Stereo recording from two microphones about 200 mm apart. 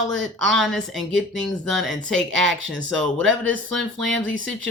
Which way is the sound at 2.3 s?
70° right (ahead or behind).